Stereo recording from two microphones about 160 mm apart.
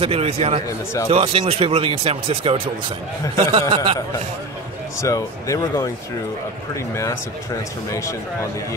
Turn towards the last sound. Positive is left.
turn(degrees=20)  # may be behind; listen again after turning